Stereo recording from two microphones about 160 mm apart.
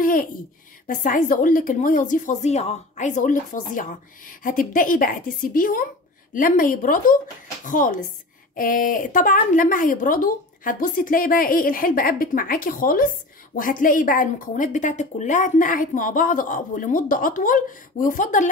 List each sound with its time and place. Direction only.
0.0 s a woman's voice: 60° left (ahead or behind)